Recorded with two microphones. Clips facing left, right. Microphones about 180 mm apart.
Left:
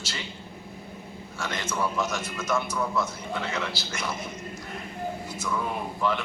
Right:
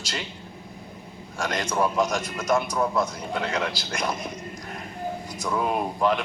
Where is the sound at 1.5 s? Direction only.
45° right (ahead or behind).